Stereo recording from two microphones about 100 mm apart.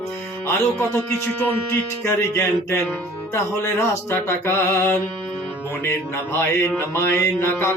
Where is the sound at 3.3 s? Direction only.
25° left (ahead or behind).